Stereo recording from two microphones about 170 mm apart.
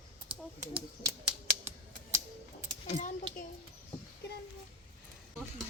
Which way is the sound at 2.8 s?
50° left (ahead or behind).